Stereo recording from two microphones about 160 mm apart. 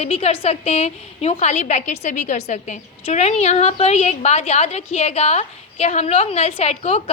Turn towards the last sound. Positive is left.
turn(degrees=40)  # may be behind; listen again after turning